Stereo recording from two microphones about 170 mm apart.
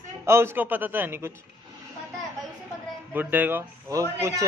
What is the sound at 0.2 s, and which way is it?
Speech, 15° right (ahead or behind).